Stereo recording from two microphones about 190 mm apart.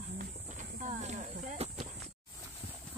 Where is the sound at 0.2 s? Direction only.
40° right (ahead or behind).